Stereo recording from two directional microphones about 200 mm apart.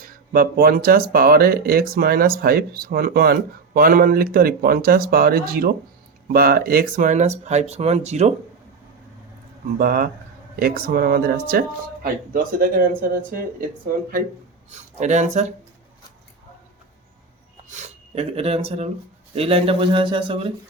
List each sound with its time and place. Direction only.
0.0 s speech: 45° right (ahead or behind)
9.7 s speech: 45° right (ahead or behind)
14.7 s speech: 35° right (ahead or behind)
17.7 s a man's voice: 35° right (ahead or behind)